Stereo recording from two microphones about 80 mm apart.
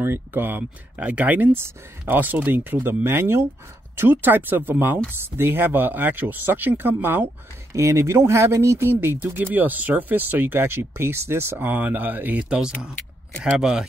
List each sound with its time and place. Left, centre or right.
0.0 s speech: right
7.7 s speech: right; by 13.8 s centre